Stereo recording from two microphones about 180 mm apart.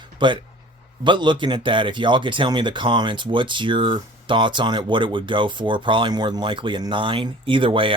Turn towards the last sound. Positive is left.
turn(degrees=-30)  # may be behind; listen again after turning